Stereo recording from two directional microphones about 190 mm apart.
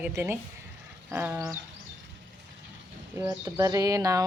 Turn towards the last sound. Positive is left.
turn(degrees=-15)  # may be behind; listen again after turning